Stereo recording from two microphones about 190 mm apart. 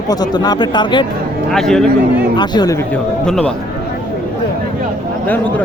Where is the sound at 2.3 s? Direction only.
20° left (ahead or behind).